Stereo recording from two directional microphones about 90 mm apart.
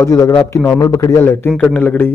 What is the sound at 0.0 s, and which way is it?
Speech, 35° left (ahead or behind).